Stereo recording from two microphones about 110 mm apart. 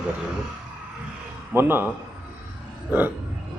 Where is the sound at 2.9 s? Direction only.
15° right (ahead or behind).